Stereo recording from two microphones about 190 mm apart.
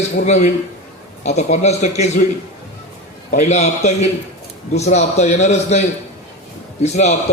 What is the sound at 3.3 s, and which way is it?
A man's voice, 40° left (ahead or behind).